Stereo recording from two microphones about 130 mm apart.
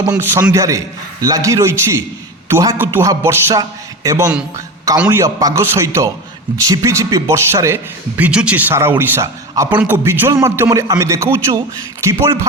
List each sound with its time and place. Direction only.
0.0 s a man's voice: 25° right (ahead or behind)
3.0 s a man's voice: 25° right (ahead or behind)